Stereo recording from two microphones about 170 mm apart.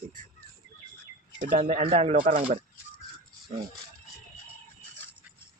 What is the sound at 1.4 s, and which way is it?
Speech, 50° right (ahead or behind).